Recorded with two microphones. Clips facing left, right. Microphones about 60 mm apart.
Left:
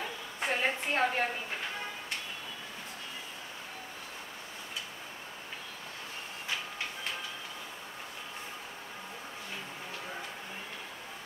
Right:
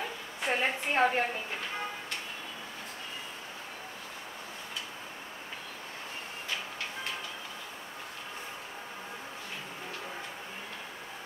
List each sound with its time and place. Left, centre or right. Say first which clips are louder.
0.5 s a woman's voice: right 1 dB; centre